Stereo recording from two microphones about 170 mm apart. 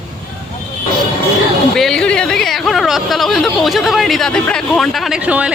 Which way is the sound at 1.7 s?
5° left (ahead or behind).